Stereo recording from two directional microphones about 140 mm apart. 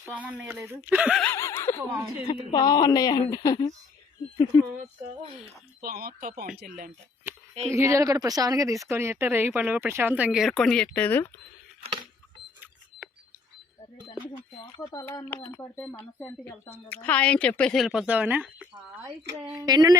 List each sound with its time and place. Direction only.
0.0 s speech: 10° right (ahead or behind)
1.2 s speech: 15° left (ahead or behind)
2.2 s speech: 35° left (ahead or behind)
5.8 s speech: 90° right
7.7 s speech: 20° right (ahead or behind); by 11.3 s 15° left (ahead or behind)
15.0 s speech: 15° left (ahead or behind); by 18.7 s 10° right (ahead or behind)
19.5 s speech: 30° right (ahead or behind)